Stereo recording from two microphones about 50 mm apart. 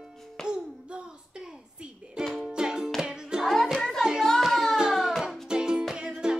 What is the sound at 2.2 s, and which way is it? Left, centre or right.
Music, centre.